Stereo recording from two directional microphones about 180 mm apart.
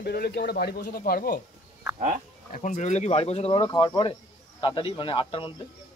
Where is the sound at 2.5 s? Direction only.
45° left (ahead or behind).